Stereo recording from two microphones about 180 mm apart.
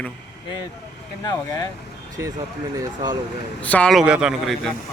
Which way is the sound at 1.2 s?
20° left (ahead or behind).